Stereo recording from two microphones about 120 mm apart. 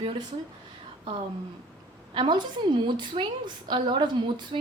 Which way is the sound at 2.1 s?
40° right (ahead or behind).